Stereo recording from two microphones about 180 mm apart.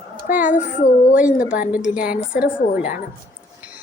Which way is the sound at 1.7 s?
5° right (ahead or behind).